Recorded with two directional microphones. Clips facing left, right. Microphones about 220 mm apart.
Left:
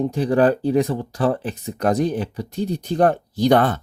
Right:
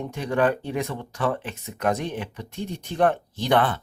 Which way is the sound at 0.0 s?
35° left (ahead or behind).